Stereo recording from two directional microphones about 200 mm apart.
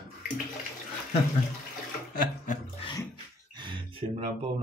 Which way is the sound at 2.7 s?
25° left (ahead or behind).